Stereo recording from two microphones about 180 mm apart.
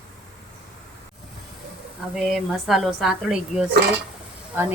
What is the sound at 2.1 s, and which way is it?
A woman's voice, centre (ahead or behind).